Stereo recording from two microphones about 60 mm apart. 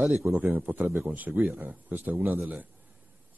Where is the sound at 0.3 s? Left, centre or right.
Right.